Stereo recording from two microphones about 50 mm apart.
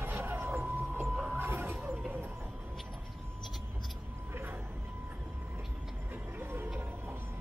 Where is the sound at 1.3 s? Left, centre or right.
Right.